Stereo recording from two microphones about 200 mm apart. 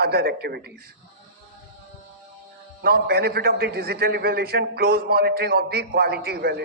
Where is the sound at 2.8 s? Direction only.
50° right (ahead or behind).